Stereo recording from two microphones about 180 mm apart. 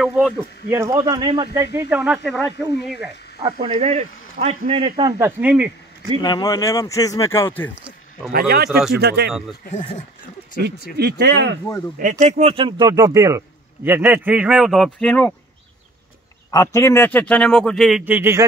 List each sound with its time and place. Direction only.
0.0 s a man's voice: 5° right (ahead or behind)
2.2 s speech: 5° left (ahead or behind)
3.6 s speech: 35° right (ahead or behind)
5.2 s a man's voice: 10° right (ahead or behind)
6.2 s a man's voice: 20° left (ahead or behind)
7.7 s a sound: 5° right (ahead or behind)
8.3 s speech: 55° right (ahead or behind)
8.6 s speech: centre (ahead or behind)
8.9 s speech: 65° right (ahead or behind)
9.7 s speech: 40° left (ahead or behind)
11.0 s speech: 65° right (ahead or behind)
12.0 s a man's voice: 45° right (ahead or behind); by 15.3 s 5° left (ahead or behind)
16.4 s a man's voice: 20° left (ahead or behind); by 18.4 s 10° right (ahead or behind)